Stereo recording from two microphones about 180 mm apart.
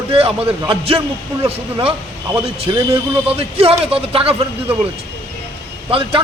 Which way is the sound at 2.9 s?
30° right (ahead or behind).